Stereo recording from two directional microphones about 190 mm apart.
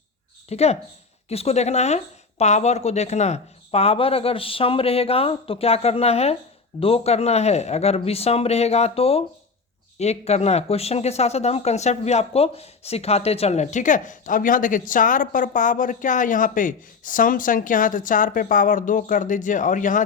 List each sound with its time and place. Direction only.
0.4 s speech: 35° left (ahead or behind)